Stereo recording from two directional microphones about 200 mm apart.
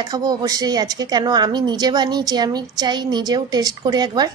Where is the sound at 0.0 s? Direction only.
20° right (ahead or behind).